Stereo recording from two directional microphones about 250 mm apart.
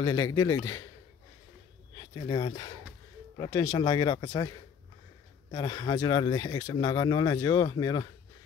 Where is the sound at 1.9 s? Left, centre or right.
Centre.